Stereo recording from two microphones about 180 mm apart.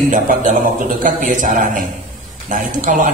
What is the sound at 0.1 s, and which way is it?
Speech, 45° right (ahead or behind).